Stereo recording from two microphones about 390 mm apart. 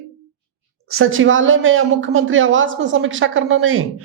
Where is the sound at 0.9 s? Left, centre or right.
Right.